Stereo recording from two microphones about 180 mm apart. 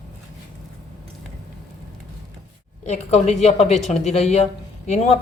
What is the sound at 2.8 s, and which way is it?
A woman's voice, 40° left (ahead or behind).